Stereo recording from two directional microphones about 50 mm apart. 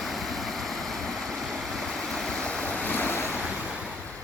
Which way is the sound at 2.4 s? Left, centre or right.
Left.